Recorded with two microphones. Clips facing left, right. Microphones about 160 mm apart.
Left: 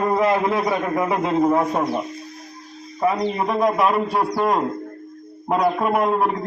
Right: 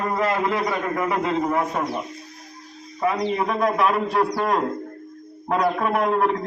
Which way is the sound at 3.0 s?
10° left (ahead or behind).